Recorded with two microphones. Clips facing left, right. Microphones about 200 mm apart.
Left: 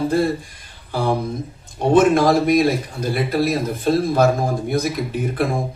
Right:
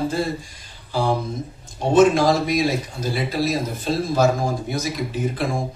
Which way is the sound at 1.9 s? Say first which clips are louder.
Left 1 dB; 55° left (ahead or behind).